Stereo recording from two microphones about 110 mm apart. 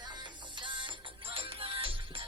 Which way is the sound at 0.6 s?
50° right (ahead or behind).